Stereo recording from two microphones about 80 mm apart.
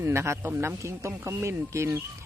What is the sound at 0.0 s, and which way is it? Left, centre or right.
Speech, right.